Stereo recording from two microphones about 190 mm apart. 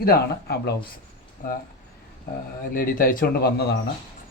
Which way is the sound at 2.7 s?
45° left (ahead or behind).